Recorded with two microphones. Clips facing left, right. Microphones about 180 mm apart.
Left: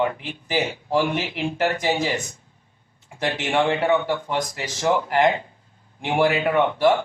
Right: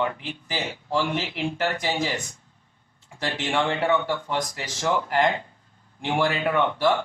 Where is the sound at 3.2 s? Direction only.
15° left (ahead or behind).